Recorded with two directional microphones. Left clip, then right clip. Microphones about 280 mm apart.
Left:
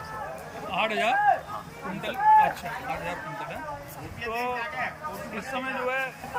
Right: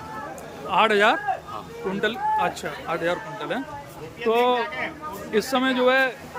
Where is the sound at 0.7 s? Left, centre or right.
Centre.